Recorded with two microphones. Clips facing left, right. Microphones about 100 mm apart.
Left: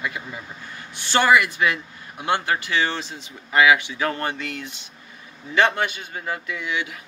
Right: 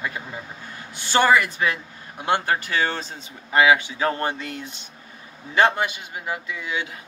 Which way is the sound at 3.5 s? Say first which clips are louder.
Even; 30° right (ahead or behind).